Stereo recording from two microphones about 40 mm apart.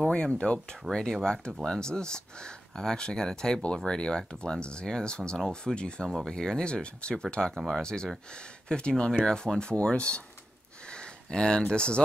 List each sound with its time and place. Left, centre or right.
0.1 s speech: left
0.9 s speech: centre
7.5 s speech: centre
7.8 s speech: centre
11.2 s speech: centre